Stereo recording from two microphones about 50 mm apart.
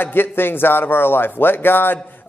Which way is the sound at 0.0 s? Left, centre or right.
Left.